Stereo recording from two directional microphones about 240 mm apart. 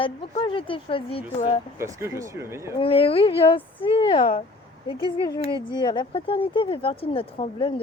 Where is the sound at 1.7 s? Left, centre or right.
Centre.